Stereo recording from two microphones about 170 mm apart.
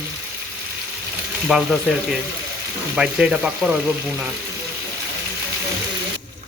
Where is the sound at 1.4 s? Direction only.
Centre (ahead or behind).